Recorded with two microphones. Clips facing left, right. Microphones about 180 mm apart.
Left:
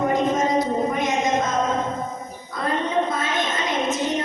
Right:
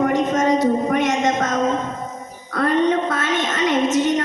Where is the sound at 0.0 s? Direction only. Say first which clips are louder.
Right 3 dB; 75° right (ahead or behind).